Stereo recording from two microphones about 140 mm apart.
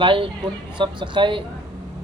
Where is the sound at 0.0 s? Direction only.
35° right (ahead or behind).